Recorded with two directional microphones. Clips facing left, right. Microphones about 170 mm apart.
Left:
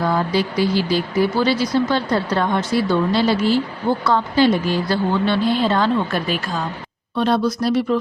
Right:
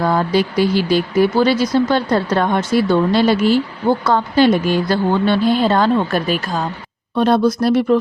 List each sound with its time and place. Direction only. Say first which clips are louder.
0.0 s speech: right 3 dB; 55° right (ahead or behind)
1.5 s a woman's voice: right 3 dB; 50° right (ahead or behind)